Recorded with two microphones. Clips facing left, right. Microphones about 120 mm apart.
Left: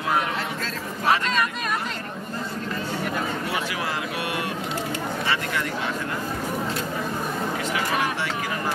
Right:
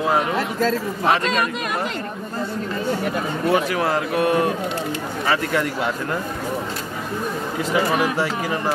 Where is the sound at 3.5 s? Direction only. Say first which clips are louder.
Right 8 dB; 40° right (ahead or behind).